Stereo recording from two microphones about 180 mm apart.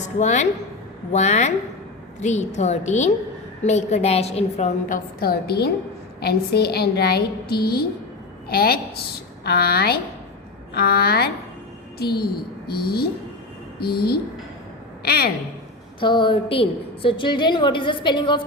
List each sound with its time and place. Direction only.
0.2 s a woman's voice: 40° left (ahead or behind); by 15.3 s 60° left (ahead or behind)
16.0 s a woman's voice: 25° left (ahead or behind)